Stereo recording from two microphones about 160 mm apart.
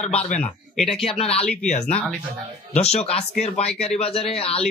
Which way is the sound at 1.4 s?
5° left (ahead or behind).